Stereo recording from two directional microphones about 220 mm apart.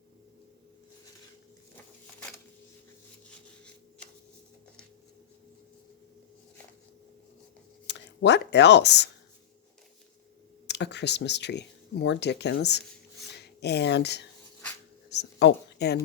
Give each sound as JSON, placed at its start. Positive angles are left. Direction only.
{"t": 7.9, "sound": "speech", "side_deg": 50}
{"t": 10.7, "sound": "speech", "side_deg": 50}
{"t": 15.1, "sound": "a sound", "side_deg": 50}